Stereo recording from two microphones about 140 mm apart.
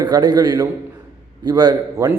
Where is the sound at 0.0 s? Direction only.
30° right (ahead or behind).